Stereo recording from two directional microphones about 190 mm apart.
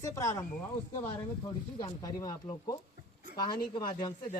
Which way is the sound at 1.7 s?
20° left (ahead or behind).